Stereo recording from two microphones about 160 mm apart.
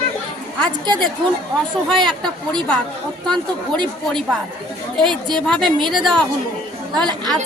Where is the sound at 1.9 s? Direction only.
5° left (ahead or behind).